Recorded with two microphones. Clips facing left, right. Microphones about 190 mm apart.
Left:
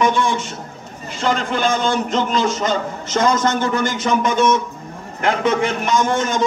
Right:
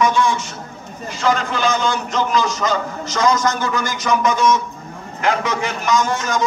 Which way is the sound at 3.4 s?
25° left (ahead or behind).